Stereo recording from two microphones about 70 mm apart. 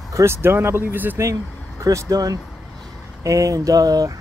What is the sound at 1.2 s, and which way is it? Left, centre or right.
Speech, right.